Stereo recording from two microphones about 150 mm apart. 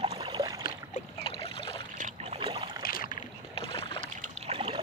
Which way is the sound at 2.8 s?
75° left (ahead or behind).